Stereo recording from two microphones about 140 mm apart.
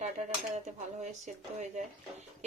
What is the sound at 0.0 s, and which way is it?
Speech, 55° right (ahead or behind).